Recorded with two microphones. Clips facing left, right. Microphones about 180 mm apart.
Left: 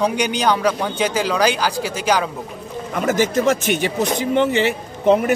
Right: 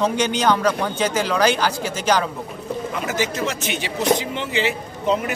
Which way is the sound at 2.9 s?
50° left (ahead or behind).